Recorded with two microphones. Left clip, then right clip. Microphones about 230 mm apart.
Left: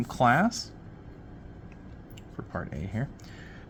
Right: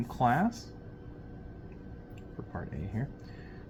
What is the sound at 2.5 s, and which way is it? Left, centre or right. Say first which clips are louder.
Speech: left 6 dB; left.